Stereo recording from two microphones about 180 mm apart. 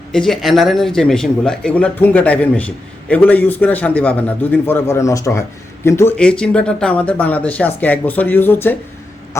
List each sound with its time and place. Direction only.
0.1 s speech: centre (ahead or behind)